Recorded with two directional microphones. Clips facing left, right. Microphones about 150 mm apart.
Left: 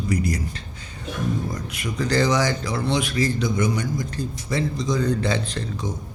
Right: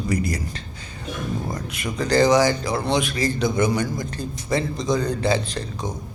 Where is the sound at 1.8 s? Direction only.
45° right (ahead or behind).